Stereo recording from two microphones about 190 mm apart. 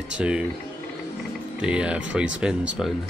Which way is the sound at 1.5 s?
5° right (ahead or behind).